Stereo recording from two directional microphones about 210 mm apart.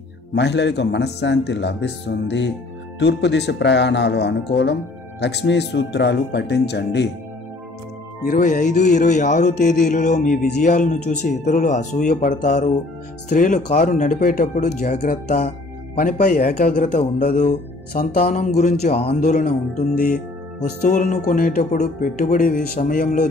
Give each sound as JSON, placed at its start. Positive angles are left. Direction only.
{"t": 0.3, "sound": "a man's voice", "side_deg": 55}
{"t": 8.2, "sound": "speech", "side_deg": 40}
{"t": 20.9, "sound": "speech", "side_deg": 35}